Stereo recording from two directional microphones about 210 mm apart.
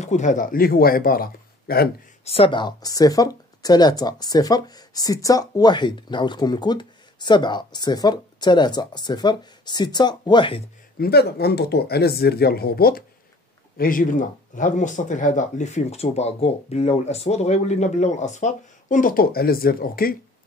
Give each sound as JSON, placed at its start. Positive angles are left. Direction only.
{"t": 0.0, "sound": "speech", "side_deg": 35}
{"t": 2.2, "sound": "speech", "side_deg": 25}
{"t": 11.0, "sound": "speech", "side_deg": 50}